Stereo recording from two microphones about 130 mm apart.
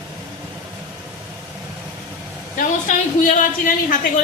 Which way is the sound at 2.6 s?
80° left.